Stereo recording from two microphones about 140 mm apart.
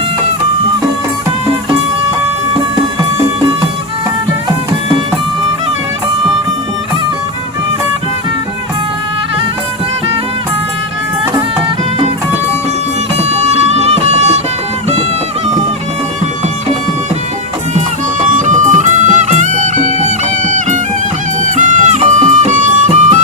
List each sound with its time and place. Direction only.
3.0 s music: 30° right (ahead or behind)
13.1 s music: 50° right (ahead or behind)
18.3 s music: 65° right (ahead or behind)